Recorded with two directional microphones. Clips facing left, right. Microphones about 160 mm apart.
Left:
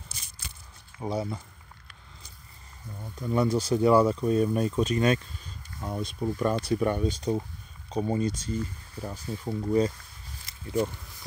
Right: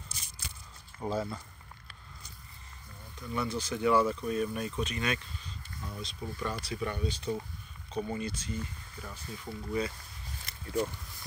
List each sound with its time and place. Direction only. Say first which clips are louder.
0.9 s speech: left 2 dB; 15° left (ahead or behind)
3.0 s speech: left 9 dB; 45° left (ahead or behind)
5.8 s speech: left 10 dB; 55° left (ahead or behind)